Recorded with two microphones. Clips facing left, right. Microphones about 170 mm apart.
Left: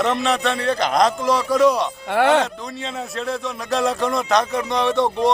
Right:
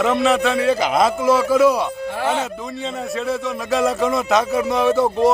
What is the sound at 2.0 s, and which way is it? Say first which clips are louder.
Speech: left 10 dB; 70° left (ahead or behind).